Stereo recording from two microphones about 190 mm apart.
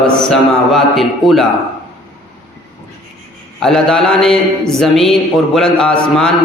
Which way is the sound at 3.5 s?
Centre (ahead or behind).